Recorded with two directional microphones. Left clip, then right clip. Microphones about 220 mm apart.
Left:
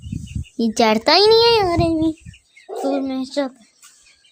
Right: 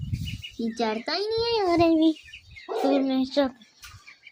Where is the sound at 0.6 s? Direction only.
40° left (ahead or behind).